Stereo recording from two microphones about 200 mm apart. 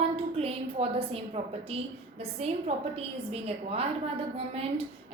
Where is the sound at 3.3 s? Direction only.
30° right (ahead or behind).